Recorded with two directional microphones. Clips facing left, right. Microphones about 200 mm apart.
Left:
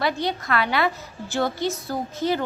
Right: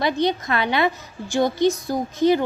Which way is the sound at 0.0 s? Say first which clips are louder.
Right 4 dB; 20° right (ahead or behind).